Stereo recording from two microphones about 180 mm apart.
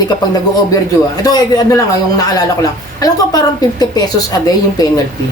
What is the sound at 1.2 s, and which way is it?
Speech, 20° left (ahead or behind).